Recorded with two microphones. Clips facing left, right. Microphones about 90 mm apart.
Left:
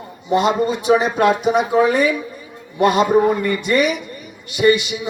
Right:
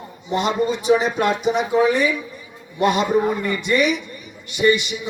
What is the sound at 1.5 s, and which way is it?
A man's voice, 45° left (ahead or behind).